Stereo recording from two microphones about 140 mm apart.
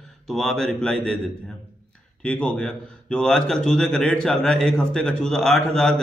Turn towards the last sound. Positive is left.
turn(degrees=5)  # may be behind; listen again after turning